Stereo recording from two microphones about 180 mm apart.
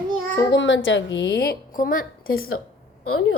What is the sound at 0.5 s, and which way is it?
A woman's voice, 90° left.